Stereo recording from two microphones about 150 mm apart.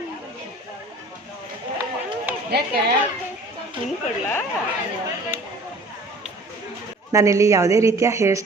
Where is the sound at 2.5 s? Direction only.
90° right.